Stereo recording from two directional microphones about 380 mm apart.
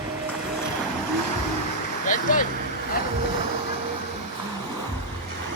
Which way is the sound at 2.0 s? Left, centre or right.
Left.